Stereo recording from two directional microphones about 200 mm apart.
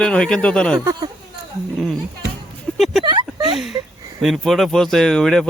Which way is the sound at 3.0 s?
20° right (ahead or behind).